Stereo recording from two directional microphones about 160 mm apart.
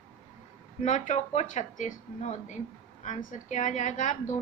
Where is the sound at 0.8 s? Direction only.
45° left (ahead or behind).